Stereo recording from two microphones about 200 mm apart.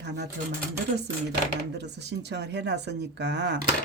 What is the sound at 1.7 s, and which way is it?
Speech, 55° right (ahead or behind).